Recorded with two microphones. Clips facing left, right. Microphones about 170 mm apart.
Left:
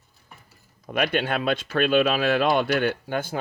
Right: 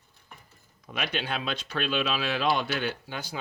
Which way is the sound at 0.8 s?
55° left (ahead or behind).